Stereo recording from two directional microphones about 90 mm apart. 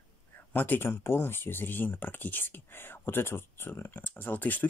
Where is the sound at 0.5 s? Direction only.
20° left (ahead or behind).